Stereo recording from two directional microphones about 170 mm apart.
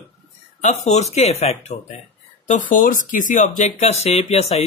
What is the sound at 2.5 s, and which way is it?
Speech, 50° left (ahead or behind).